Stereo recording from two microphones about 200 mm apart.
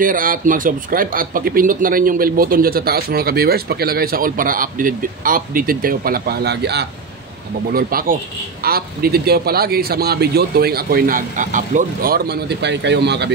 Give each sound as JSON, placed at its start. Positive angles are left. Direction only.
{"t": 0.0, "sound": "a man's voice", "side_deg": -45}
{"t": 7.7, "sound": "a man's voice", "side_deg": -45}